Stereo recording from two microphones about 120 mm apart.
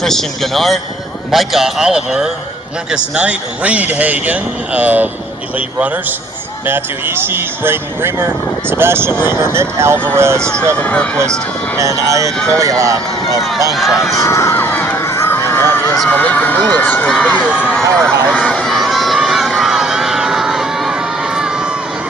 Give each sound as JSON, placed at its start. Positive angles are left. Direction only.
{"t": 0.0, "sound": "a man's voice", "side_deg": 5}
{"t": 10.4, "sound": "speech", "side_deg": 10}
{"t": 11.8, "sound": "speech", "side_deg": -25}
{"t": 13.7, "sound": "a man's voice", "side_deg": 0}
{"t": 14.2, "sound": "run", "side_deg": 20}
{"t": 16.0, "sound": "speech", "side_deg": 15}
{"t": 17.7, "sound": "crowd", "side_deg": 5}